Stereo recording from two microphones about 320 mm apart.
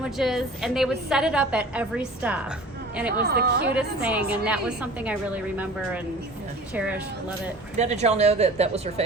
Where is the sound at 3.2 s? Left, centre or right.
Right.